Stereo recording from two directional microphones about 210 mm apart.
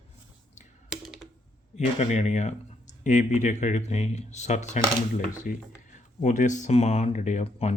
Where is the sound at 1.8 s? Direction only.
35° left (ahead or behind).